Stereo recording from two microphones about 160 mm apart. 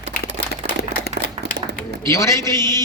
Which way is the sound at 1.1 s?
90° right.